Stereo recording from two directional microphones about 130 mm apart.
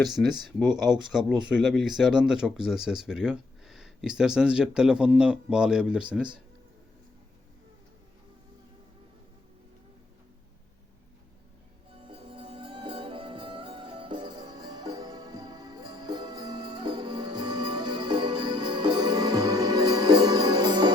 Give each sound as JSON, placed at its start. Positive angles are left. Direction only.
{"t": 1.0, "sound": "speech", "side_deg": -5}
{"t": 11.9, "sound": "music", "side_deg": -40}